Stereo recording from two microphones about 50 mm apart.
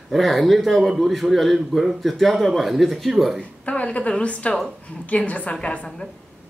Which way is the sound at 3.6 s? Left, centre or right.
Left.